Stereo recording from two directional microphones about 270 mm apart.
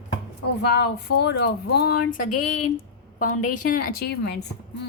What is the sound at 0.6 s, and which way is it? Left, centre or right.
A woman's voice, left.